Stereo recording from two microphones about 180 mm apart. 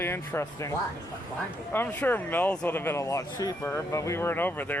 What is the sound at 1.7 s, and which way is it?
Speech, 10° left (ahead or behind).